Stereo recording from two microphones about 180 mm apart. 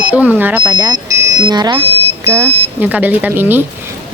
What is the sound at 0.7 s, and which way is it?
Speech, 20° right (ahead or behind).